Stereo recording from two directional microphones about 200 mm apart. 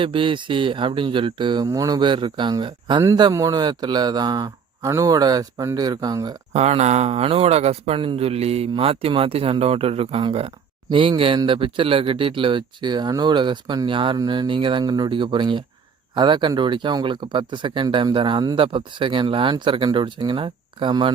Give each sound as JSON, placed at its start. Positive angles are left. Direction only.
{"t": 0.0, "sound": "speech", "side_deg": -25}
{"t": 6.5, "sound": "speech", "side_deg": -35}